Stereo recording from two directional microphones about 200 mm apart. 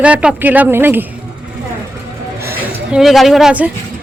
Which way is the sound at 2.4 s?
5° right (ahead or behind).